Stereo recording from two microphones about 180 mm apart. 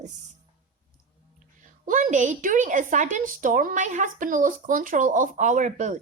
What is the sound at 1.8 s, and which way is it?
A woman's voice, 45° right (ahead or behind).